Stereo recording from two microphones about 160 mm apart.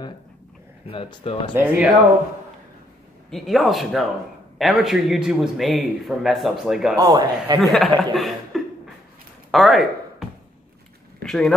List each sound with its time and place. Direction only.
0.8 s speech: 35° left (ahead or behind)
1.5 s speech: 10° right (ahead or behind)
3.3 s a man's voice: centre (ahead or behind)
7.0 s a man's voice: 30° right (ahead or behind)
7.6 s speech: centre (ahead or behind)
9.5 s a sound: centre (ahead or behind)
11.2 s a man's voice: 5° left (ahead or behind)